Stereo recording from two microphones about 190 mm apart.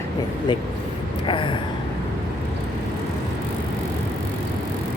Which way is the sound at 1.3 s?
25° left (ahead or behind).